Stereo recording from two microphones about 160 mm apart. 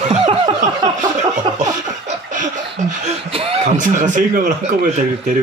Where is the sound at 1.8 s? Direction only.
50° right (ahead or behind).